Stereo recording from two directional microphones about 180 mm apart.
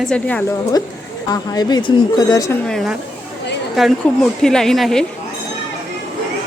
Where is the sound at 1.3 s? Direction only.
20° left (ahead or behind).